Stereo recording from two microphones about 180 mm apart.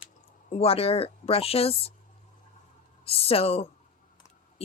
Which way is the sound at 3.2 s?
35° left (ahead or behind).